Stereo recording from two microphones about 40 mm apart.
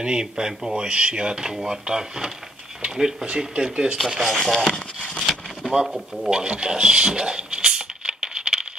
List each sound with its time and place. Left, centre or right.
0.0 s speech: centre
3.3 s speech: right
4.2 s speech: centre
4.6 s speech: centre
5.3 s a sound: centre
5.9 s speech: centre
6.3 s a sound: right